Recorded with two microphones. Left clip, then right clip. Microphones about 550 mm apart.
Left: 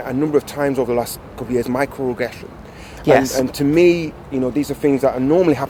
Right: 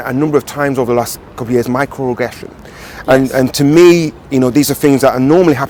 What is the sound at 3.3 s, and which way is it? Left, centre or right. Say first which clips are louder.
Speech: right 7 dB; right.